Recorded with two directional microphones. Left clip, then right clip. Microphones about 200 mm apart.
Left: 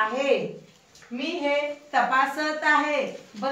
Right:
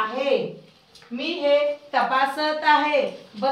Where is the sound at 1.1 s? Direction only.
15° right (ahead or behind).